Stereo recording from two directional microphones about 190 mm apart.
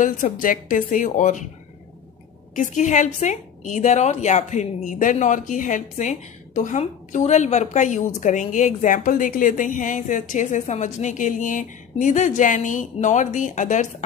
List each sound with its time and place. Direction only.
0.0 s a woman's voice: 45° left (ahead or behind)
2.5 s a woman's voice: 40° left (ahead or behind)